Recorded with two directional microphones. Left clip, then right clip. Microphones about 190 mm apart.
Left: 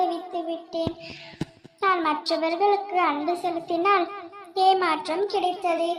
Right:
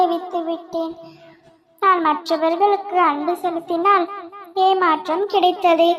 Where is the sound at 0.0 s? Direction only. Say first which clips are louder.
Right 7 dB; 25° right (ahead or behind).